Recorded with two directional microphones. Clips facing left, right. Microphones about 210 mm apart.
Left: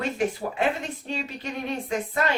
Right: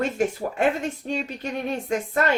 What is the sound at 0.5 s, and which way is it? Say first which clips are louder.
Speech: right 3 dB; 45° right (ahead or behind).